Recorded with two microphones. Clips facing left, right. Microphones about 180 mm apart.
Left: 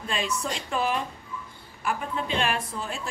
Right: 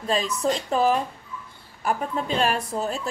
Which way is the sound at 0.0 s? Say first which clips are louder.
Right 6 dB; 35° right (ahead or behind).